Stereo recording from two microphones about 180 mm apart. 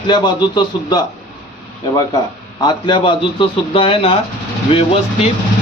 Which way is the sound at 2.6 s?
25° left (ahead or behind).